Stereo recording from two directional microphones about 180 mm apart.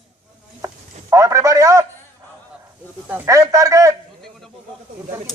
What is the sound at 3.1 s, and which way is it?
Speech, 15° right (ahead or behind).